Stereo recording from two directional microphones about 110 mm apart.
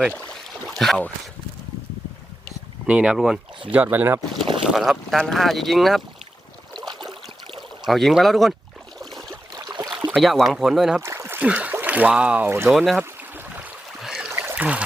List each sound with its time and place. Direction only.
0.7 s speech: centre (ahead or behind)
2.8 s speech: 10° right (ahead or behind)
3.8 s speech: 20° right (ahead or behind)
4.7 s speech: centre (ahead or behind)
7.9 s speech: centre (ahead or behind)
9.6 s a sound: 40° right (ahead or behind)
10.2 s speech: centre (ahead or behind)
11.0 s speech: 25° right (ahead or behind)
12.6 s speech: centre (ahead or behind)
13.0 s a sound: 15° right (ahead or behind)
14.0 s a sound: 5° right (ahead or behind)
14.3 s trickle: 25° right (ahead or behind)